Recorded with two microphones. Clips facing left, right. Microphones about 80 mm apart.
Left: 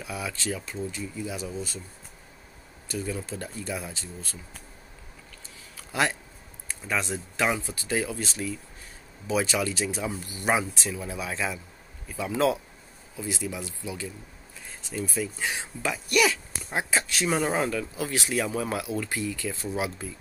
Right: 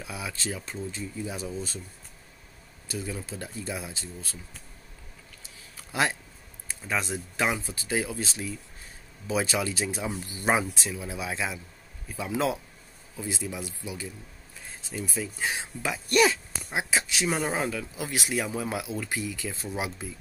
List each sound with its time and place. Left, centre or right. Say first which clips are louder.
0.0 s speech: left 2 dB; right
2.9 s speech: left 3 dB; centre
5.9 s speech: left 1 dB; right
15.0 s speech: left 2 dB; centre
16.1 s speech: right 2 dB; right
16.6 s speech: left 1 dB; centre
17.9 s speech: left 2 dB; centre